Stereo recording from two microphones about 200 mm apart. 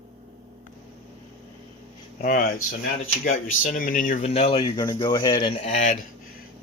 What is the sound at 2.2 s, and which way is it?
Speech, 40° left (ahead or behind).